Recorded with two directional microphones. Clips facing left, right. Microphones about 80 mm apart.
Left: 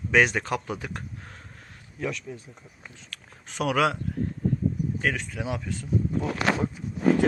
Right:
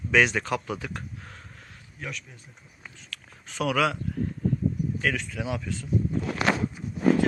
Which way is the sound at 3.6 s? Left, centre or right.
Left.